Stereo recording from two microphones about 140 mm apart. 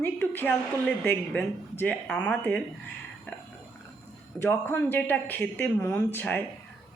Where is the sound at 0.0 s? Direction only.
15° left (ahead or behind).